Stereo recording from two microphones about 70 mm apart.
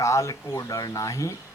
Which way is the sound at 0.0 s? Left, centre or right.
Left.